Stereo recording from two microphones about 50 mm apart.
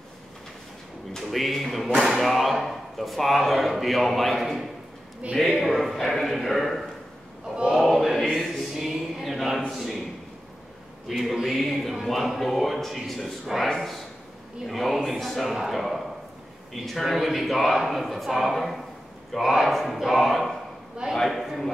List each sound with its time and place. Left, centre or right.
1.3 s speech: centre
5.2 s a man's voice: right
5.6 s speech: centre
7.7 s choir: centre
11.1 s a man's voice: centre